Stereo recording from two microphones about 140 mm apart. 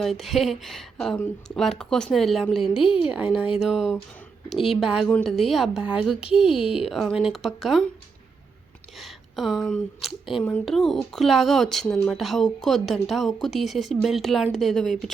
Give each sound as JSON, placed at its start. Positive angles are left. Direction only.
{"t": 0.0, "sound": "a woman's voice", "side_deg": 0}
{"t": 2.7, "sound": "a woman's voice", "side_deg": 40}
{"t": 3.6, "sound": "a woman's voice", "side_deg": -5}
{"t": 9.0, "sound": "a woman's voice", "side_deg": 0}